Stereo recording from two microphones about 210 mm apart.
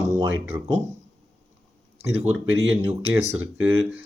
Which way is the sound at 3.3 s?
10° right (ahead or behind).